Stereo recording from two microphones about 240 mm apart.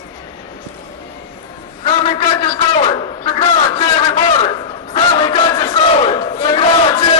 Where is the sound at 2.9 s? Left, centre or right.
Left.